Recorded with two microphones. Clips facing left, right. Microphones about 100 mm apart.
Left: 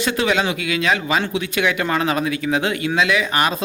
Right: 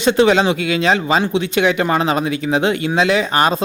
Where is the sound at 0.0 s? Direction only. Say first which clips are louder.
Right 6 dB; 25° right (ahead or behind).